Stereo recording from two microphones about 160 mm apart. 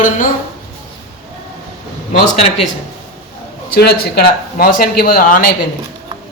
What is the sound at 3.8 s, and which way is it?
Speech, 80° left.